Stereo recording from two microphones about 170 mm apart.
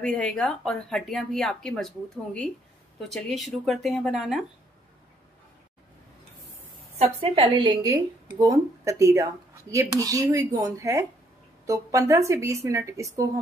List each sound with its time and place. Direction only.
0.0 s speech: 5° left (ahead or behind)
7.0 s a woman's voice: 35° right (ahead or behind); by 13.0 s 15° right (ahead or behind)